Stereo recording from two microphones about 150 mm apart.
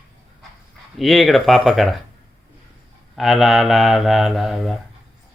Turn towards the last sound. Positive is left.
turn(degrees=0)  # may be behind; listen again after turning